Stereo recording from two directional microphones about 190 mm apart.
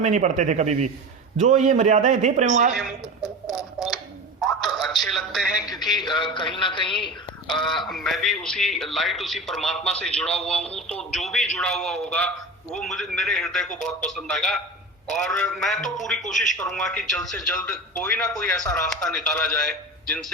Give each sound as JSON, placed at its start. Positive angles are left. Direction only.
{"t": 0.0, "sound": "a man's voice", "side_deg": -40}
{"t": 3.6, "sound": "telephone", "side_deg": 0}
{"t": 6.1, "sound": "a man's voice", "side_deg": 25}
{"t": 7.5, "sound": "a man's voice", "side_deg": 0}